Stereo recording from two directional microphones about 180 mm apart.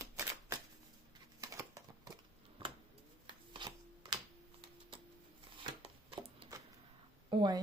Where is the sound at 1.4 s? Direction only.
20° right (ahead or behind).